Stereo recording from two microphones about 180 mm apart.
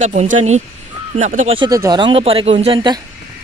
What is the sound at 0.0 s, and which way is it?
Speech, 40° right (ahead or behind).